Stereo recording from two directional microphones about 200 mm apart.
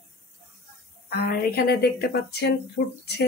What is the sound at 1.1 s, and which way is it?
Speech, 50° left (ahead or behind).